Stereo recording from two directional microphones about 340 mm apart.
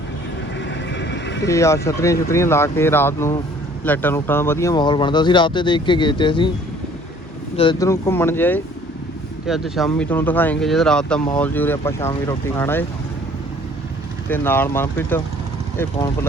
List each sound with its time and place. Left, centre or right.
0.6 s music: left
1.5 s speech: centre
7.5 s speech: centre
14.3 s speech: centre